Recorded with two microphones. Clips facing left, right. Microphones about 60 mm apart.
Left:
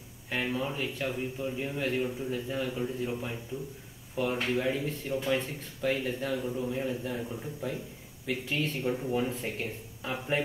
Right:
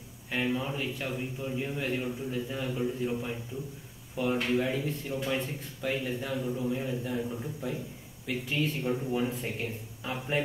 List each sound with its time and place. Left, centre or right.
0.3 s speech: centre